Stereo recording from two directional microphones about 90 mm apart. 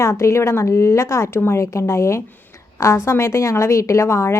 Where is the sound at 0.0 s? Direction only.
30° left (ahead or behind).